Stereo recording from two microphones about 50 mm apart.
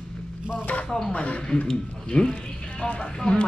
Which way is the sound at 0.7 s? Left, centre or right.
Left.